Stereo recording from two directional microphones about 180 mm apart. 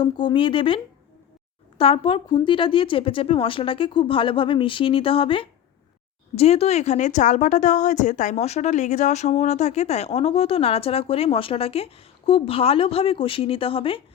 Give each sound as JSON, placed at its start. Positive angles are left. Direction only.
{"t": 0.0, "sound": "speech", "side_deg": 25}
{"t": 1.8, "sound": "a woman's voice", "side_deg": 30}